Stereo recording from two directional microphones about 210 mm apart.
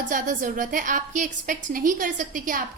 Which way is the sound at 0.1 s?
40° right (ahead or behind).